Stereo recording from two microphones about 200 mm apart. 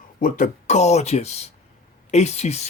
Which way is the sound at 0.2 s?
45° left (ahead or behind).